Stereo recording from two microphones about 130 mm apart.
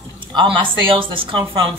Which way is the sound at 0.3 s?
40° right (ahead or behind).